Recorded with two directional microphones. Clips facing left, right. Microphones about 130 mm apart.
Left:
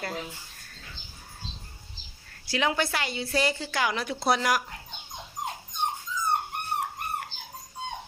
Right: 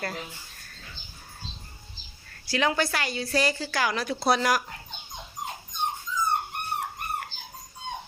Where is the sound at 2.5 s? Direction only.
20° left (ahead or behind).